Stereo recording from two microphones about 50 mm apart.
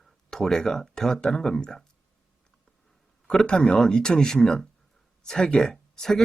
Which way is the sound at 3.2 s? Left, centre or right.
Centre.